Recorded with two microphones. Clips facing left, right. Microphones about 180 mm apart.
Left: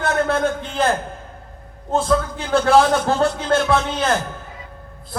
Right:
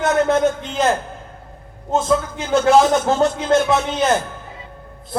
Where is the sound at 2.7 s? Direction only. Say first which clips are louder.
Left 1 dB; 20° right (ahead or behind).